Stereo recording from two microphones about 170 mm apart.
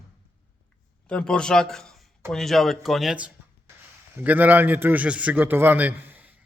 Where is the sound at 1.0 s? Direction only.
5° left (ahead or behind).